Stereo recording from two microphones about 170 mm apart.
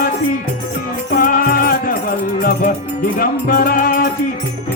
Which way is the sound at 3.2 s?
60° left (ahead or behind).